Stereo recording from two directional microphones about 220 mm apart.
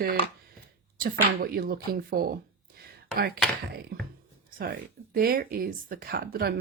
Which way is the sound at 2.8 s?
45° right (ahead or behind).